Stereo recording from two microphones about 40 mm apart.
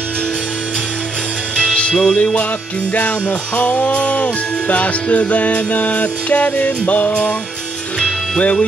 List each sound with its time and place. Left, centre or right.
1.6 s music: left
2.9 s jingle bell: left